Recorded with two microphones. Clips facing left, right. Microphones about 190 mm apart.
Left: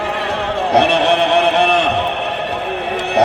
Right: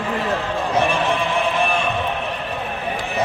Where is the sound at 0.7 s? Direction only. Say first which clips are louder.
Left 7 dB; 70° left (ahead or behind).